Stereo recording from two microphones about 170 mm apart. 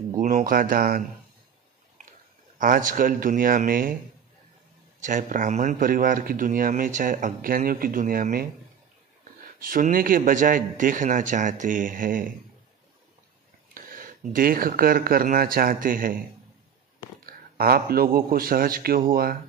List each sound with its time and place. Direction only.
0.2 s speech: 50° right (ahead or behind)
2.6 s speech: 55° right (ahead or behind)
5.0 s speech: 50° right (ahead or behind)
9.6 s speech: 55° right (ahead or behind)
13.7 s speech: 55° right (ahead or behind)
17.3 s a man's voice: 65° right (ahead or behind)